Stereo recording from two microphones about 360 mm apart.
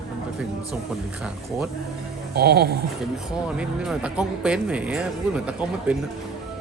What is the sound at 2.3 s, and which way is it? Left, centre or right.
Speech, right.